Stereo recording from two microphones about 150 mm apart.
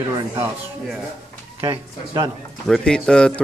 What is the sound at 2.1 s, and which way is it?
Speech, 25° right (ahead or behind).